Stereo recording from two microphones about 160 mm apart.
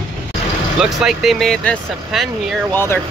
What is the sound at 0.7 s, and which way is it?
Speech, centre (ahead or behind).